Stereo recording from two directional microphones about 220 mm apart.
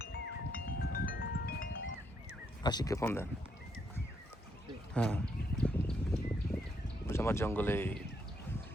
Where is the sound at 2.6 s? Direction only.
20° left (ahead or behind).